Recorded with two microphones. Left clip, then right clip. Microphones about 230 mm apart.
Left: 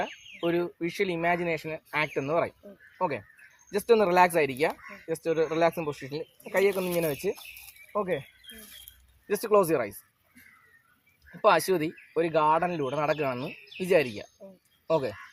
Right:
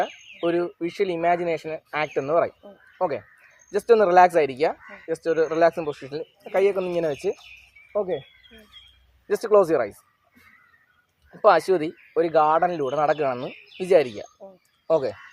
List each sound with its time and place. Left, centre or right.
0.3 s speech: left
9.2 s speech: left
11.4 s speech: left